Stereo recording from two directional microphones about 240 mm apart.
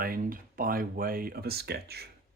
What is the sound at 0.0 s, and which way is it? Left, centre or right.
Speech, right.